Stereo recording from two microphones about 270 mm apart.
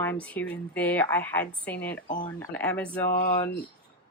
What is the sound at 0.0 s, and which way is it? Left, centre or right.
Speech, centre.